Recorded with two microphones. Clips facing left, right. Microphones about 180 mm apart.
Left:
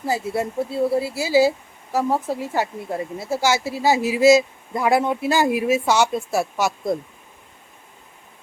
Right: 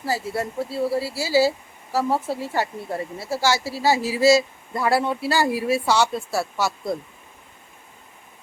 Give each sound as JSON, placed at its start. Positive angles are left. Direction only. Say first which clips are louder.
{"t": 0.0, "sound": "speech", "louder": "left 2 dB", "side_deg": 20}